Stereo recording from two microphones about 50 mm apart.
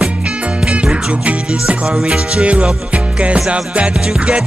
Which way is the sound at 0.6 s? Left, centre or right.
Centre.